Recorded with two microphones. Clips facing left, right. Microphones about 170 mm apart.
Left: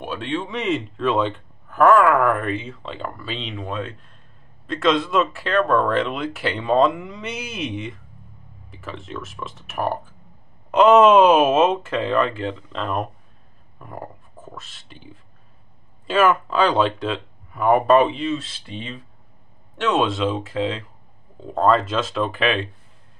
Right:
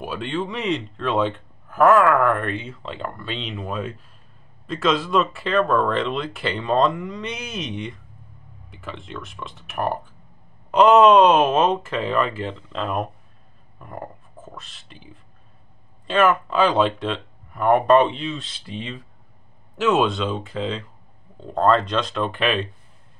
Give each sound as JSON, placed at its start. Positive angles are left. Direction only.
{"t": 0.0, "sound": "a man's voice", "side_deg": 0}
{"t": 16.1, "sound": "a man's voice", "side_deg": 5}